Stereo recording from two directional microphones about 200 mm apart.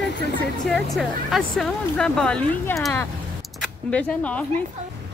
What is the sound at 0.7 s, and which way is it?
A woman's voice, centre (ahead or behind).